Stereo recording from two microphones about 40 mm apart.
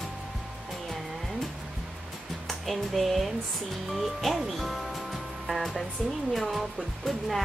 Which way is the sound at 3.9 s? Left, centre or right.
Centre.